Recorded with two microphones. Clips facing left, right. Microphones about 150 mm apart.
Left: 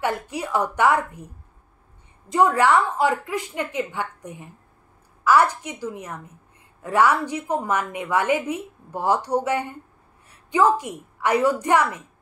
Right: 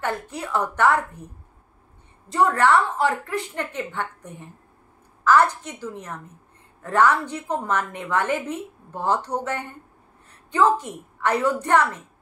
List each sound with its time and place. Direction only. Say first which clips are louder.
0.3 s a woman's voice: left 2 dB; 15° left (ahead or behind)
2.2 s a woman's voice: left 1 dB; 15° left (ahead or behind)